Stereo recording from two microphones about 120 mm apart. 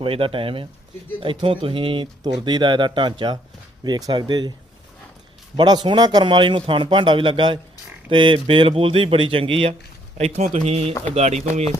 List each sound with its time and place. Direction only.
0.0 s speech: 50° right (ahead or behind); by 4.5 s 35° right (ahead or behind)
5.5 s speech: 40° right (ahead or behind)
10.2 s a man's voice: 65° right (ahead or behind)